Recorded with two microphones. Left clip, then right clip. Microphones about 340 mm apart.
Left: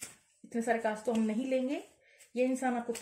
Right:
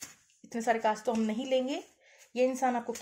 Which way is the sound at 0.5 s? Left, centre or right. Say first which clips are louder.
Right 3 dB; right.